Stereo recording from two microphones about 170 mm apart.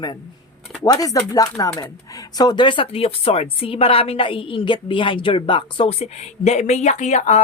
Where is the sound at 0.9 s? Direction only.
20° left (ahead or behind).